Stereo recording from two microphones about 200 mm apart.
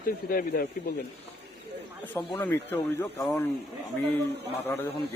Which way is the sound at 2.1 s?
10° left (ahead or behind).